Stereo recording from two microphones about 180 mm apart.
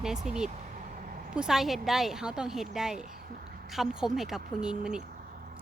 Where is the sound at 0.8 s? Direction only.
50° right (ahead or behind).